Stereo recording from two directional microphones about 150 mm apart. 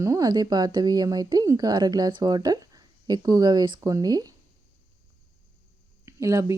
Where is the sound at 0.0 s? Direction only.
20° right (ahead or behind).